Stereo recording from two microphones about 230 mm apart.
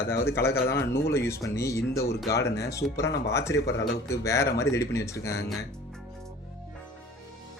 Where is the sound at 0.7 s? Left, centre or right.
Left.